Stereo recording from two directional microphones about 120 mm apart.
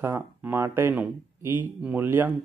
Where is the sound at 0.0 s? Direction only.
15° right (ahead or behind).